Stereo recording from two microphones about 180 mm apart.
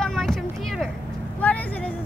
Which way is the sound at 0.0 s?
5° left (ahead or behind).